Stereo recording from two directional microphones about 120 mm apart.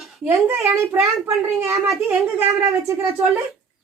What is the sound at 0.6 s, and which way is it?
A woman's voice, 25° right (ahead or behind).